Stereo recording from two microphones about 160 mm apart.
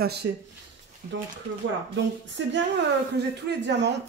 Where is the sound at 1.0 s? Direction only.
50° right (ahead or behind).